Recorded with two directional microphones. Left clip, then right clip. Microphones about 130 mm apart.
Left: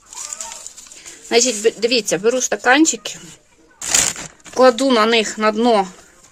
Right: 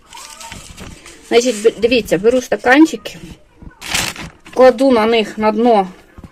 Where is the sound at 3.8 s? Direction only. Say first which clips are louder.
Even; 90° left.